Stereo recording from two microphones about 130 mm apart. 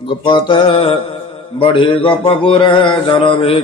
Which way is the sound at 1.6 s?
40° left (ahead or behind).